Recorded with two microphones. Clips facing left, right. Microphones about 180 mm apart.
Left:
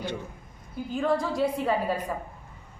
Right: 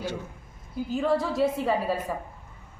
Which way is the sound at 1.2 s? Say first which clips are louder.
Right 1 dB; centre (ahead or behind).